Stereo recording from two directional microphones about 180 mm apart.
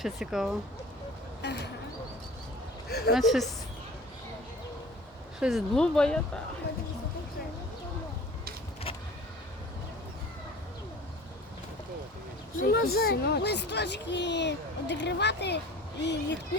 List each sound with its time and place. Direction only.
0.0 s speech: centre (ahead or behind)
1.4 s speech: 70° left (ahead or behind)
2.9 s speech: 55° left (ahead or behind)
3.2 s speech: centre (ahead or behind)
5.4 s speech: centre (ahead or behind)
12.5 s speech: 60° left (ahead or behind)